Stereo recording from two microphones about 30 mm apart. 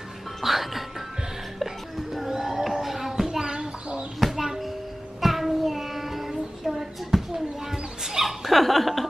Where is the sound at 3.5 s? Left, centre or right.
Right.